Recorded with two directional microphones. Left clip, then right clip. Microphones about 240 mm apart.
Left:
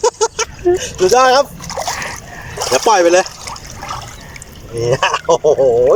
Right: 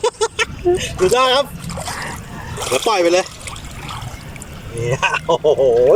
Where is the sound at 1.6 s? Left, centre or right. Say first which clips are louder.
Left 6 dB; centre.